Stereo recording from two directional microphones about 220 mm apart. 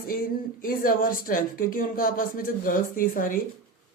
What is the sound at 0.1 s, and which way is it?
Speech, 40° left (ahead or behind).